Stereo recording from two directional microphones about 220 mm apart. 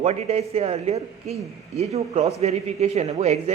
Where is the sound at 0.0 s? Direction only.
30° right (ahead or behind).